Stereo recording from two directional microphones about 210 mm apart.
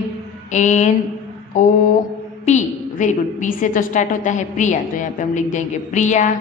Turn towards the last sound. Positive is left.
turn(degrees=35)  # may be behind; listen again after turning